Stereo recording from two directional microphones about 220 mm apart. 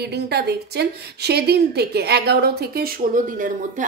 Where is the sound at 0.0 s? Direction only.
50° right (ahead or behind).